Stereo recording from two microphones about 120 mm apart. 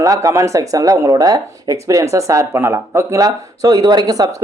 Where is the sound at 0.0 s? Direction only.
25° right (ahead or behind).